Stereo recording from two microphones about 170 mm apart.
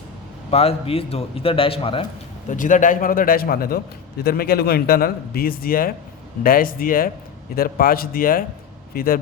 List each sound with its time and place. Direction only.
0.5 s a man's voice: 35° left (ahead or behind)
2.5 s a man's voice: 50° left (ahead or behind)